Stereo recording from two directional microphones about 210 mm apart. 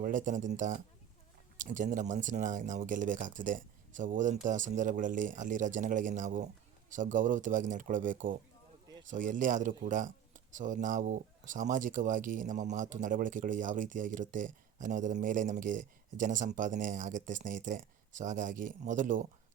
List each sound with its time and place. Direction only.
0.0 s speech: 40° right (ahead or behind)